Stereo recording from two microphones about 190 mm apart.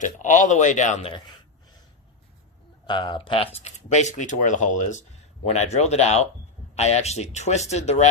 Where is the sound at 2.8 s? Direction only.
25° left (ahead or behind).